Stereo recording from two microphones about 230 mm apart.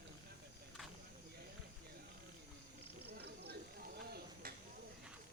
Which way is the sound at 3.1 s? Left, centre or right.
Right.